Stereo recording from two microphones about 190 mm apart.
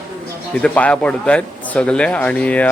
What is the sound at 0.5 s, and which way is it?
Speech, 5° left (ahead or behind).